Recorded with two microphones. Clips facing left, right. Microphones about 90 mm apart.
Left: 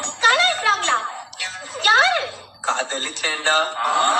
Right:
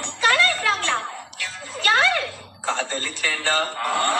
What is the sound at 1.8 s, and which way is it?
Speech, 20° left (ahead or behind).